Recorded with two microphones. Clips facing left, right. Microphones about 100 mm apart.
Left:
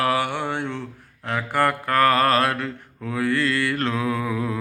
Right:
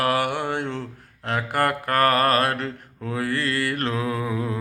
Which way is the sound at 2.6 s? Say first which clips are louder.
Even; 35° right (ahead or behind).